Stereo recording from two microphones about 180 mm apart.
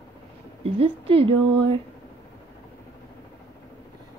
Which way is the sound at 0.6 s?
30° right (ahead or behind).